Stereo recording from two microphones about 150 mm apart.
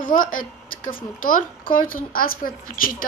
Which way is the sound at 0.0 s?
65° left (ahead or behind).